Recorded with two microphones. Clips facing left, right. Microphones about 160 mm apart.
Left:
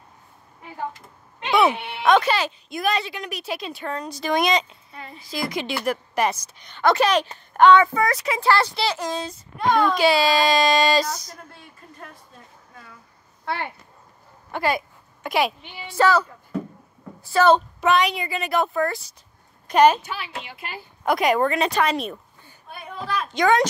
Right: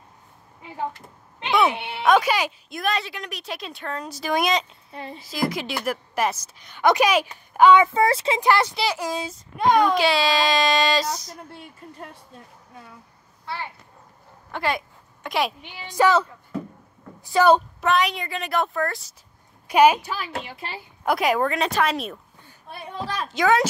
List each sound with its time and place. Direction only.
2.0 s speech: 10° right (ahead or behind)
2.7 s speech: centre (ahead or behind)
4.9 s speech: 30° right (ahead or behind)
5.3 s speech: 5° right (ahead or behind)
6.8 s a woman's voice: 15° right (ahead or behind)
7.8 s speech: 25° right (ahead or behind)
9.9 s speech: centre (ahead or behind)
14.5 s speech: 5° left (ahead or behind)
15.9 s speech: 20° right (ahead or behind)
17.8 s speech: centre (ahead or behind)
20.0 s speech: 40° right (ahead or behind)
21.0 s speech: 5° right (ahead or behind)
22.7 s speech: 35° right (ahead or behind)
23.3 s speech: 5° right (ahead or behind)